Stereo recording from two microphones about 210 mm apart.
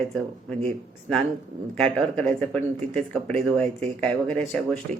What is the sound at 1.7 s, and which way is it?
Speech, 5° left (ahead or behind).